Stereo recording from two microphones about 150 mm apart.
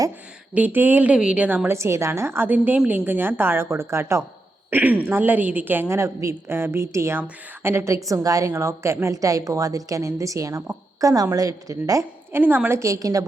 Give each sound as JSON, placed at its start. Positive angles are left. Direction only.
{"t": 0.5, "sound": "a woman's voice", "side_deg": -10}